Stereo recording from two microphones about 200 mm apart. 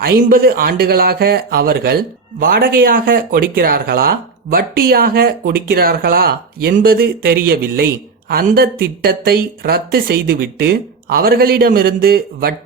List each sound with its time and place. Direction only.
0.0 s speech: 50° right (ahead or behind)